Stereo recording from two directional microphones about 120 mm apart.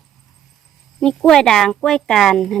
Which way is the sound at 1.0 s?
5° left (ahead or behind).